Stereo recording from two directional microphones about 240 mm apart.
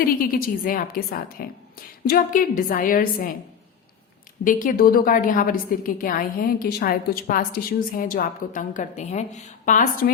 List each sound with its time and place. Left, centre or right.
0.0 s a woman's voice: left
4.4 s a woman's voice: left